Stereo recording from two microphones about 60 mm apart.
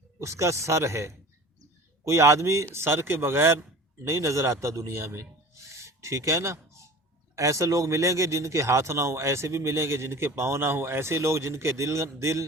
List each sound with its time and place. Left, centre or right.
0.2 s speech: right
2.7 s speech: right
4.0 s a man's voice: right